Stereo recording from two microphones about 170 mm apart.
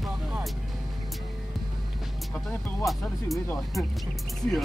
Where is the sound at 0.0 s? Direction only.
Centre (ahead or behind).